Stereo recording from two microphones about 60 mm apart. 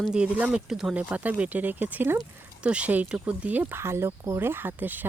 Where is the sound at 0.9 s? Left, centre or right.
Right.